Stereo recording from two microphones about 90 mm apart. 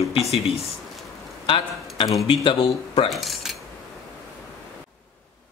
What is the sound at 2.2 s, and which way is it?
Speech, 65° left (ahead or behind).